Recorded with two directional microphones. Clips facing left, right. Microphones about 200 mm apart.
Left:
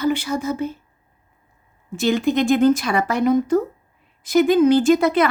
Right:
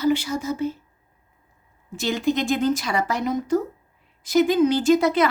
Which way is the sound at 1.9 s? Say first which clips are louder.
Left 4 dB; 55° left (ahead or behind).